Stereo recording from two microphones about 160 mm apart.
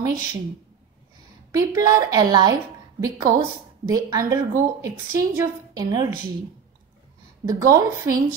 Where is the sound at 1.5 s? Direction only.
20° right (ahead or behind).